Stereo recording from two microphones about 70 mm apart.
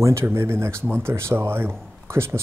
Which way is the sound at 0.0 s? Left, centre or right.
Right.